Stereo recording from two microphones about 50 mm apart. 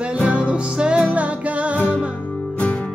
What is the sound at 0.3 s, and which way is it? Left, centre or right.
Music, right.